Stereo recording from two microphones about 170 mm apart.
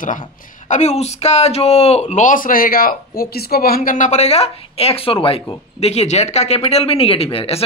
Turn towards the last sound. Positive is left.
turn(degrees=35)  # may be behind; listen again after turning